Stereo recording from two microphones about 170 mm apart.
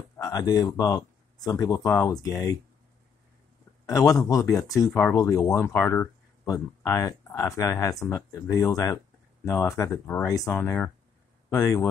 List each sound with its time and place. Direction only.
0.2 s speech: 20° left (ahead or behind)
3.8 s speech: 20° left (ahead or behind)